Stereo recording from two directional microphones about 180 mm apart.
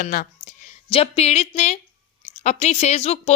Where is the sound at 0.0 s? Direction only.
50° left (ahead or behind).